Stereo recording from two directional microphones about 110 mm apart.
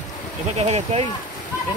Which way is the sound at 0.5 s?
70° right (ahead or behind).